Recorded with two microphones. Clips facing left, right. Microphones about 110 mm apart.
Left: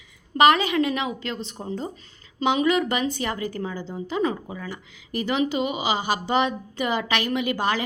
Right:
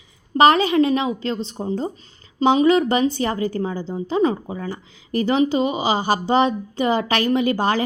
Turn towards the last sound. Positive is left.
turn(degrees=-35)  # may be behind; listen again after turning